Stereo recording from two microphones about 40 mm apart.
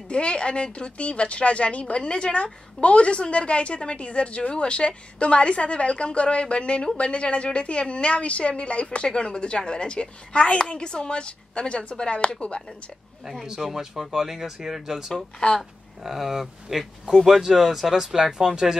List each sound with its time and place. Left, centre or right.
0.1 s speech: left
13.2 s speech: centre